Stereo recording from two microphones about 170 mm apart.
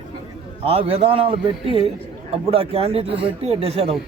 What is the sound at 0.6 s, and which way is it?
Speech, 35° right (ahead or behind).